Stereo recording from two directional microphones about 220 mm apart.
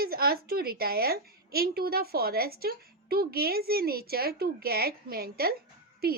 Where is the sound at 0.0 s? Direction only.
45° right (ahead or behind).